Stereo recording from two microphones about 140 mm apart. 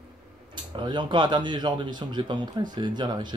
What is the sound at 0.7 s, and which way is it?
Speech, 35° right (ahead or behind).